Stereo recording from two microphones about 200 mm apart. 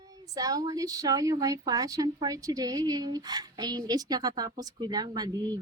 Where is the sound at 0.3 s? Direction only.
20° right (ahead or behind).